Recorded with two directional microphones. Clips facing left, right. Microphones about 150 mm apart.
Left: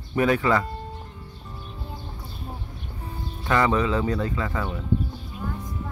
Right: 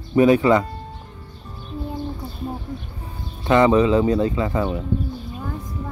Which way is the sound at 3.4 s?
20° right (ahead or behind).